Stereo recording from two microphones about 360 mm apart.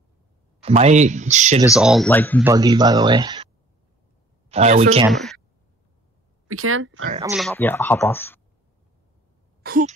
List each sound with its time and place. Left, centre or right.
0.6 s speech: centre
1.7 s speech: centre
2.4 s speech: centre
4.5 s speech: centre
5.1 s speech: centre
6.4 s speech: right
7.1 s speech: centre
7.3 s speech: centre
9.6 s speech: right